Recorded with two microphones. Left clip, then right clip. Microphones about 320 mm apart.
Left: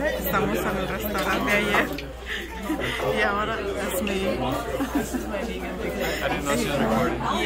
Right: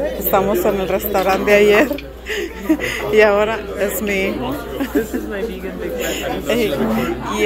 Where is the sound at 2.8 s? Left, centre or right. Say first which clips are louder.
Right 10 dB; centre.